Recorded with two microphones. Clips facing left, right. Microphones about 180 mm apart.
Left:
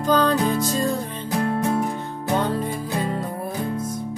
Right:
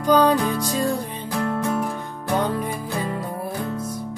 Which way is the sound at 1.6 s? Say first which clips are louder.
Left 1 dB; 25° left (ahead or behind).